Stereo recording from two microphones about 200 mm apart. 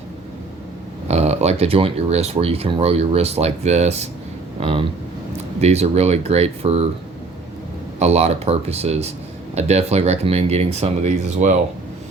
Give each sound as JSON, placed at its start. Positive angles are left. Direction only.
{"t": 1.0, "sound": "speech", "side_deg": -35}
{"t": 7.9, "sound": "speech", "side_deg": -30}